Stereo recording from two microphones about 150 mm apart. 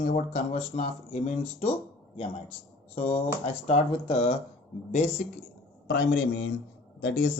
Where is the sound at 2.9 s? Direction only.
40° left (ahead or behind).